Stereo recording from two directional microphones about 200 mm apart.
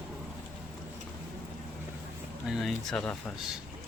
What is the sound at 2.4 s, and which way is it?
Speech, centre (ahead or behind).